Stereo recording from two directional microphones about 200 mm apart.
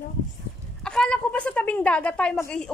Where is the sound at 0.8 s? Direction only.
5° left (ahead or behind).